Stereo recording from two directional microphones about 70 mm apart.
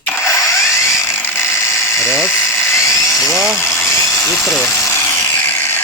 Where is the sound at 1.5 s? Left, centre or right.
Left.